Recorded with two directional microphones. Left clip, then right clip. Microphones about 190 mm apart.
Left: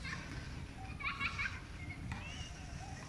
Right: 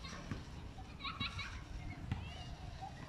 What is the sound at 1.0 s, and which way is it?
Children playing, 20° right (ahead or behind).